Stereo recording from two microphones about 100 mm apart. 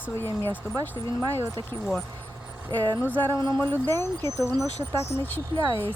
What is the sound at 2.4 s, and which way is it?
Vehicle, 10° right (ahead or behind).